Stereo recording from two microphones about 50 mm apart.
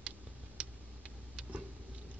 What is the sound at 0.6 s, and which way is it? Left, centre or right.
Tick, centre.